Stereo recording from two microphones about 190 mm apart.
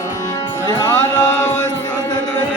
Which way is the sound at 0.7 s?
15° left (ahead or behind).